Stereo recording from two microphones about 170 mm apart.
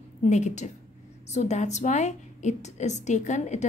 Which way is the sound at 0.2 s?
45° left (ahead or behind).